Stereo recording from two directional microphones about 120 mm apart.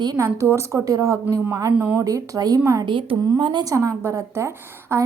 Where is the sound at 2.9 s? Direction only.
45° right (ahead or behind); by 5.0 s 25° right (ahead or behind).